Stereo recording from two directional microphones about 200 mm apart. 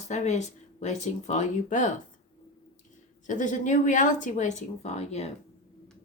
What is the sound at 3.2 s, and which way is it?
Speech, 40° left (ahead or behind).